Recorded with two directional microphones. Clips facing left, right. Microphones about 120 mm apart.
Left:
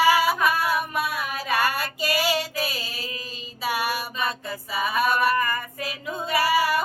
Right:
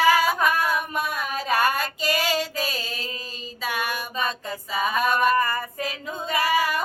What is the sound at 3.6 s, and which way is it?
Music, 10° left (ahead or behind).